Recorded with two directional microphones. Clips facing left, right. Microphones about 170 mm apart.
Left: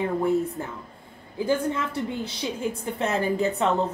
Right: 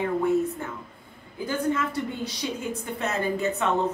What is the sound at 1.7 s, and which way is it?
A man's voice, 25° left (ahead or behind).